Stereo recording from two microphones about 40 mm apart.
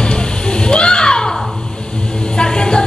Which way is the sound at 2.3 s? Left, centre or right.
Centre.